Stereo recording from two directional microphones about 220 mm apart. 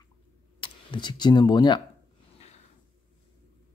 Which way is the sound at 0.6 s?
20° left (ahead or behind).